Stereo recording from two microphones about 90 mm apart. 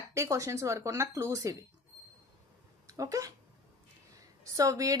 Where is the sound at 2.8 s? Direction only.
35° right (ahead or behind).